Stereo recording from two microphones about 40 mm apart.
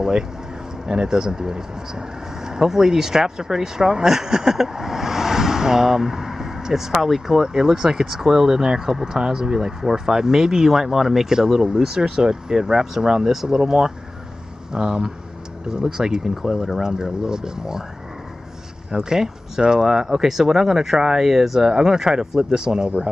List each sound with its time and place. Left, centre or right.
0.8 s speech: centre
18.9 s speech: centre